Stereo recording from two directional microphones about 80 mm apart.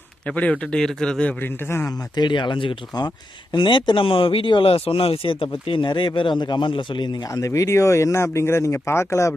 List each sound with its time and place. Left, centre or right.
0.3 s speech: centre
1.4 s a man's voice: left
2.1 s speech: left
3.5 s speech: left
7.3 s speech: left